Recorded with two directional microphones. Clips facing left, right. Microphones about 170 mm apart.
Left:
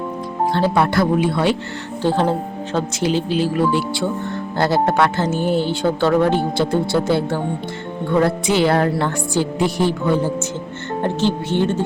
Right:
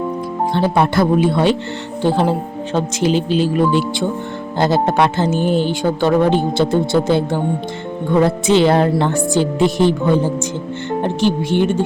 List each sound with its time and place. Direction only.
0.5 s speech: 15° right (ahead or behind)
11.0 s speech: 15° right (ahead or behind)